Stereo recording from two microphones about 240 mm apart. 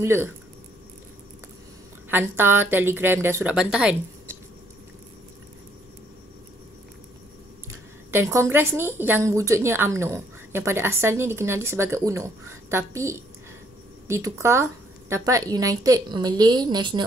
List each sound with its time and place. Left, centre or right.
0.0 s a woman's voice: centre
2.0 s a woman's voice: centre
8.1 s a woman's voice: centre